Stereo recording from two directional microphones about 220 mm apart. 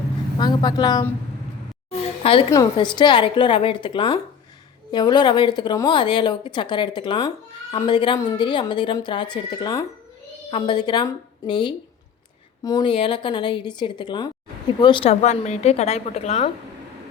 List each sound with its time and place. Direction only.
0.3 s a woman's voice: 20° left (ahead or behind)
1.9 s a sound: 25° left (ahead or behind)
2.5 s a woman's voice: 20° left (ahead or behind)